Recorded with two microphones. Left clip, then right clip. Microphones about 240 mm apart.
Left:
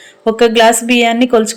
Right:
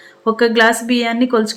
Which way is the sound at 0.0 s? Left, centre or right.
Centre.